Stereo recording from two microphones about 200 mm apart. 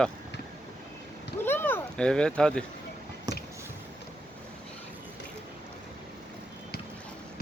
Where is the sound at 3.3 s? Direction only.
15° right (ahead or behind).